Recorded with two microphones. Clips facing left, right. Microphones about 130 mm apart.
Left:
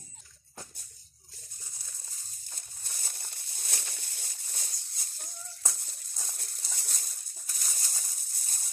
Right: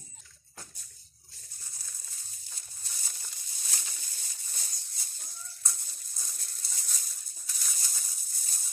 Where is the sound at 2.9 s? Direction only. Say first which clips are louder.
Left 2 dB; 55° left (ahead or behind).